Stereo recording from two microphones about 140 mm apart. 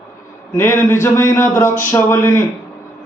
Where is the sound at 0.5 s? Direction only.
20° left (ahead or behind).